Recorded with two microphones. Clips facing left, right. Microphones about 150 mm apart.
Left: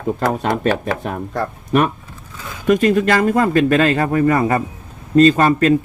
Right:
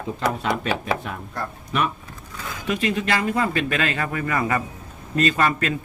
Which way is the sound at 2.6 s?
45° left (ahead or behind).